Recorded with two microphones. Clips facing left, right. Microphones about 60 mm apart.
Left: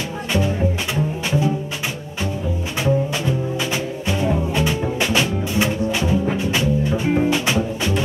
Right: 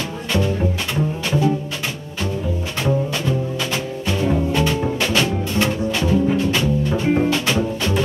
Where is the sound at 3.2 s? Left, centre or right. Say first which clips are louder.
Even; centre.